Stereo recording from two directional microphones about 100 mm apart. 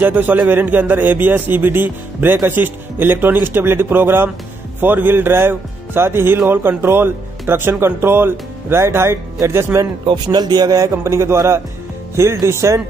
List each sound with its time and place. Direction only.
0.0 s speech: 20° right (ahead or behind)
10.0 s speech: 45° right (ahead or behind); by 12.8 s 30° right (ahead or behind)